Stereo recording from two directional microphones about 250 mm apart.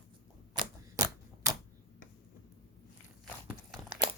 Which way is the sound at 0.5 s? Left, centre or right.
Centre.